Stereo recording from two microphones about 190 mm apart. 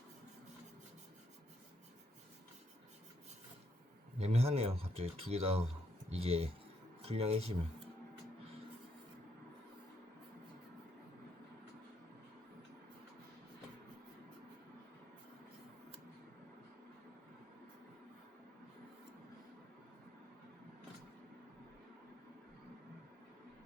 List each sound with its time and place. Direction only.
4.2 s speech: 35° right (ahead or behind)